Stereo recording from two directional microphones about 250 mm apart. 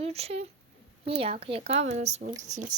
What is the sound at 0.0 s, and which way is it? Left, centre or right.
Speech, right.